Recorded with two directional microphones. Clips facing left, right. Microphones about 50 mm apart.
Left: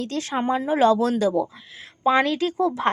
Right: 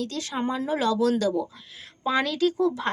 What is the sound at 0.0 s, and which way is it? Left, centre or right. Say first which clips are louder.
Speech: left 4 dB; left.